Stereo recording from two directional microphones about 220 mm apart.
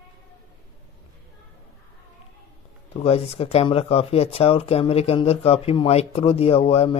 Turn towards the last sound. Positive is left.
turn(degrees=25)  # may be behind; listen again after turning